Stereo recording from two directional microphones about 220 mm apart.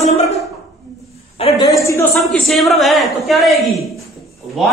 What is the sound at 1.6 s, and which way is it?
Speech, 15° left (ahead or behind).